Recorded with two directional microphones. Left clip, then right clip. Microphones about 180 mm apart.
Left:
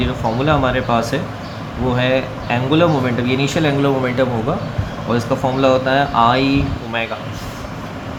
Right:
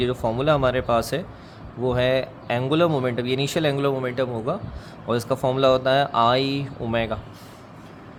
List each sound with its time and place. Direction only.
0.0 s speech: 65° right (ahead or behind)
5.0 s speech: 70° right (ahead or behind)